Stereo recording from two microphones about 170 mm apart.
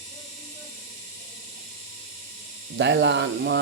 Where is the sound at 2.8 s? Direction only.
90° right.